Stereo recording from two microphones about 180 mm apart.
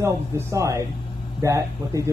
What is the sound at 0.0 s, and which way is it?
Speech, 15° right (ahead or behind).